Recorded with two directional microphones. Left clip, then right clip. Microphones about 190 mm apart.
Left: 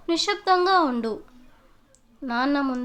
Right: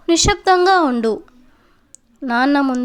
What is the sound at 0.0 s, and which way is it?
A woman's voice, 35° right (ahead or behind).